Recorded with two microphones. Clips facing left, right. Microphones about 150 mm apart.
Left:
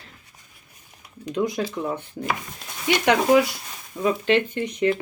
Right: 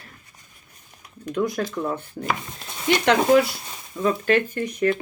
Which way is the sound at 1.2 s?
20° left (ahead or behind).